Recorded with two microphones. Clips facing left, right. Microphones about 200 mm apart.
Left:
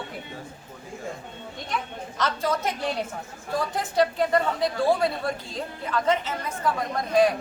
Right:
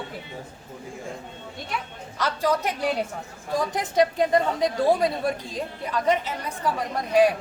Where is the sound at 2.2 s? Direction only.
10° right (ahead or behind).